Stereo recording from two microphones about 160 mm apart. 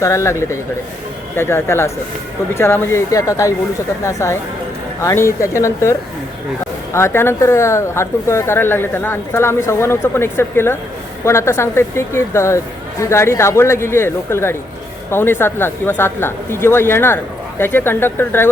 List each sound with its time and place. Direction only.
0.0 s speech: 20° left (ahead or behind)